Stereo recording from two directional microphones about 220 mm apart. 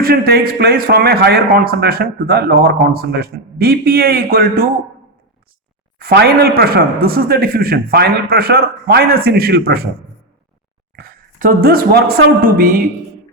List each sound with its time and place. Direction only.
0.0 s a man's voice: 45° right (ahead or behind)
6.0 s a man's voice: 45° right (ahead or behind)
10.9 s a woman's voice: 40° right (ahead or behind)